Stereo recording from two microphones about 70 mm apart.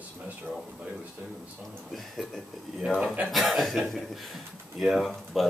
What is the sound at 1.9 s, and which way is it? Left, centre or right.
Speech, centre.